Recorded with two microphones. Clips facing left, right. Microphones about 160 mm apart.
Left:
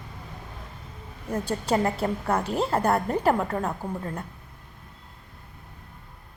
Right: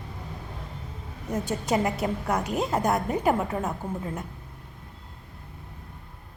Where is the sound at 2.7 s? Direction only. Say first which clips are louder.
Left 2 dB; 15° right (ahead or behind).